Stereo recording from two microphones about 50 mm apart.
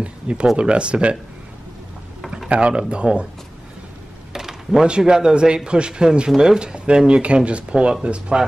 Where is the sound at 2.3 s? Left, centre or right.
Centre.